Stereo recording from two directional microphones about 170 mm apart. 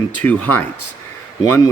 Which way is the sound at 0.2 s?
10° left (ahead or behind).